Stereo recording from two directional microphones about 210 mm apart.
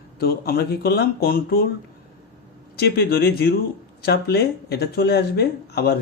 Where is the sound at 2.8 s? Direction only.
50° left (ahead or behind).